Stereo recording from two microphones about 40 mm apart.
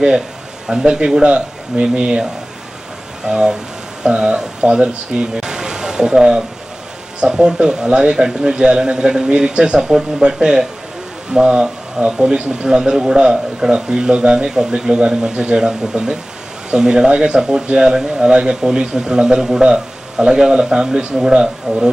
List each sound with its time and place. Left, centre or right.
0.7 s a man's voice: centre
3.2 s a man's voice: centre
17.3 s a man's voice: centre